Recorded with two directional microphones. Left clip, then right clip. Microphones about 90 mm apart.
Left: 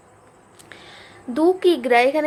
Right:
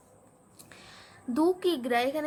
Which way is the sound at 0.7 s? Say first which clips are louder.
Left 9 dB; 35° right (ahead or behind).